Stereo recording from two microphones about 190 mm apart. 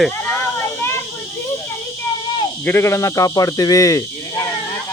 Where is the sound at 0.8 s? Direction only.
15° left (ahead or behind).